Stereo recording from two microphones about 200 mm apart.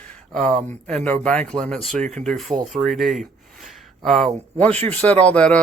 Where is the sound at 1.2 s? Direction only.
5° left (ahead or behind).